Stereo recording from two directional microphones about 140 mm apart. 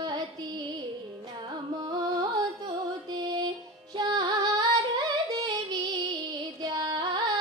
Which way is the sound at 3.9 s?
35° right (ahead or behind).